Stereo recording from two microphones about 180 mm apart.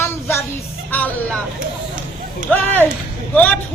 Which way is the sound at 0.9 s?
10° left (ahead or behind).